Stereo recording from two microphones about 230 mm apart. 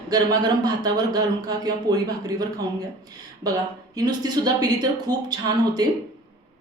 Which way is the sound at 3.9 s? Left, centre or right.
Centre.